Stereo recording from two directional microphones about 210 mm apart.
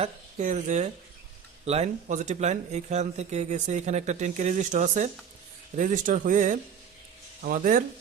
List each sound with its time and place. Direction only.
0.0 s speech: 35° right (ahead or behind)